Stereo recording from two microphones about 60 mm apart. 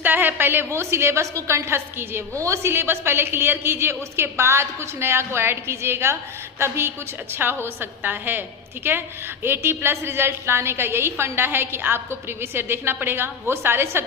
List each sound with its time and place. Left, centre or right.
0.0 s a woman's voice: right
0.8 s a man's voice: right
2.3 s a man's voice: right